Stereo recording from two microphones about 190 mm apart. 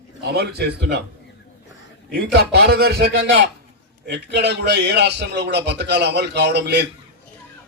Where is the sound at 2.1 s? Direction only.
60° right (ahead or behind).